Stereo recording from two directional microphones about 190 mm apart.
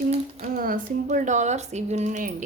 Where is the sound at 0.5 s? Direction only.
45° right (ahead or behind).